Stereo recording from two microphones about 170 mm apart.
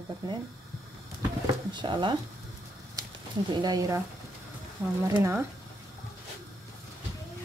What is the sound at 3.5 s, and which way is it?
Speech, 25° right (ahead or behind).